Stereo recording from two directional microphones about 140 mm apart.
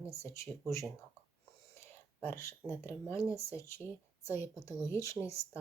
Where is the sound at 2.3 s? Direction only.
20° left (ahead or behind).